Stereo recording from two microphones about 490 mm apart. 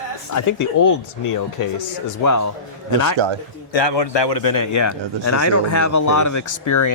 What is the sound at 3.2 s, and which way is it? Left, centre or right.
Speech, right.